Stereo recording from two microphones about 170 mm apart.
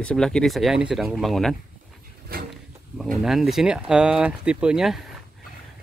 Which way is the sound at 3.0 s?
Centre (ahead or behind).